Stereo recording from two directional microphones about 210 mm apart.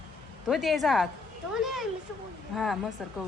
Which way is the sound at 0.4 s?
Centre (ahead or behind).